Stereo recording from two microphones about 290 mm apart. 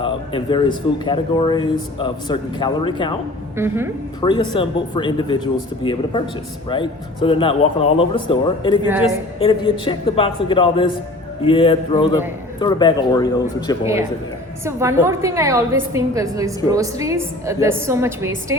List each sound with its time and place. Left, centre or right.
0.0 s speech: centre
3.6 s a woman's voice: centre
4.2 s speech: centre
14.6 s a woman's voice: centre